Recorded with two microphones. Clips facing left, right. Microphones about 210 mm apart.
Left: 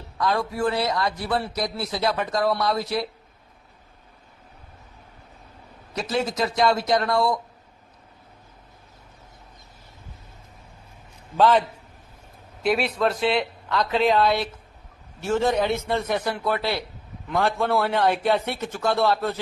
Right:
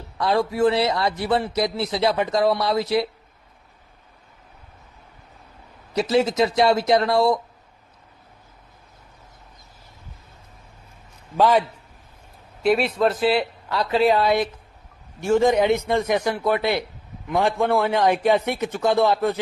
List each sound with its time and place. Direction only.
0.2 s a man's voice: 25° right (ahead or behind)
6.0 s a man's voice: 25° right (ahead or behind)
11.3 s a man's voice: 15° right (ahead or behind)
12.6 s speech: centre (ahead or behind)
15.2 s a man's voice: 15° right (ahead or behind)
17.7 s speech: centre (ahead or behind)
17.9 s a man's voice: 15° right (ahead or behind)